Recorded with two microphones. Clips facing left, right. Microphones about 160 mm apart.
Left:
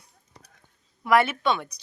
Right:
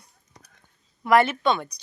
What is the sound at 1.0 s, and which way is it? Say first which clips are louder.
Speech: right 2 dB; 5° left (ahead or behind).